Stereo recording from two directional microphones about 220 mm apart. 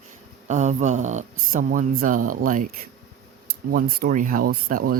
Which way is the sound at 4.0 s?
35° right (ahead or behind).